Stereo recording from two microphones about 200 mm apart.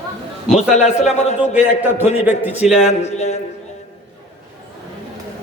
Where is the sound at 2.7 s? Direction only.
30° left (ahead or behind).